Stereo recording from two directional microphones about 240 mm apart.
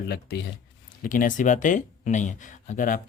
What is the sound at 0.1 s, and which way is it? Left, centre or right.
Speech, left.